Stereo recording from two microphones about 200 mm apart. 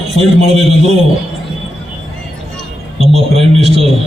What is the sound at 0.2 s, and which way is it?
Speech, 30° right (ahead or behind).